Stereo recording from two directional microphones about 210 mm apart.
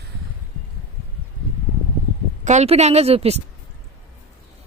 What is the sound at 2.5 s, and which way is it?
Speech, 30° right (ahead or behind).